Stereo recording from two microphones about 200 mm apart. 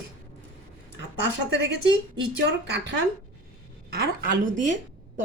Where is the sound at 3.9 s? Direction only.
50° right (ahead or behind).